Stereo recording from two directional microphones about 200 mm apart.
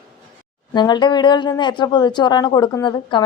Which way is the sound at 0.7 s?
20° left (ahead or behind).